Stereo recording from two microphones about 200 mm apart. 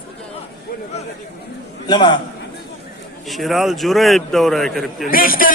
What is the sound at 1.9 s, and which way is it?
Speech, 20° left (ahead or behind).